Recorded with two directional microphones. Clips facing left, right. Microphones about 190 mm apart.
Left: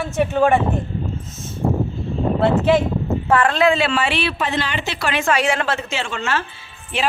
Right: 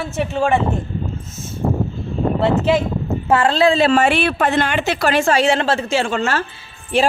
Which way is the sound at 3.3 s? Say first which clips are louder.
Right 2 dB; 25° right (ahead or behind).